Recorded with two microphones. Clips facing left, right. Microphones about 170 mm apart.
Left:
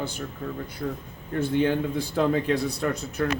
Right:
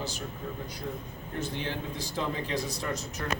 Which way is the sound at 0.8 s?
70° left (ahead or behind).